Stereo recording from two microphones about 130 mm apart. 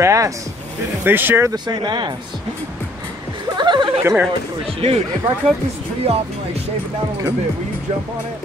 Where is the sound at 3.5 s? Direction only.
35° right (ahead or behind).